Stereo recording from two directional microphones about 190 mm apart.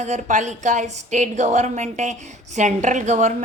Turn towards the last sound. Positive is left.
turn(degrees=-40)  # may be behind; listen again after turning